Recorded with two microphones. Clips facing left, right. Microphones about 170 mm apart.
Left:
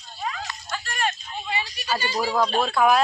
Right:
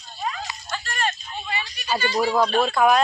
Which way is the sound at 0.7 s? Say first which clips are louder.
Even; 10° left (ahead or behind).